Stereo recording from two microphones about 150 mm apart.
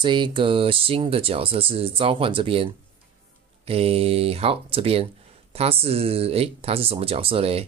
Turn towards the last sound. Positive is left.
turn(degrees=-40)  # may be behind; listen again after turning